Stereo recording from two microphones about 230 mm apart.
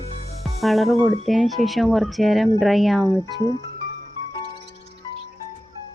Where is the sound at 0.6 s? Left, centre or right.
Centre.